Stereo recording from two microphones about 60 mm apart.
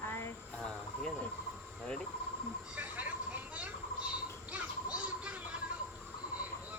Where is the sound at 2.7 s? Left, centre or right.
Right.